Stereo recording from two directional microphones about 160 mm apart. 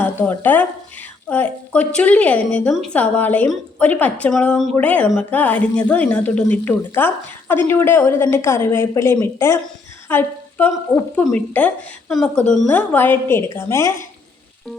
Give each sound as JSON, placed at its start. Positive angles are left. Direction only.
{"t": 0.0, "sound": "a woman's voice", "side_deg": 10}